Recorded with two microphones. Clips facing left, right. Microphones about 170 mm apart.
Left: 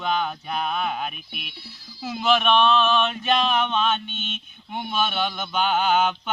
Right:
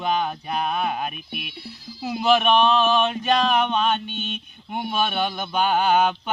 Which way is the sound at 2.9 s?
40° right (ahead or behind).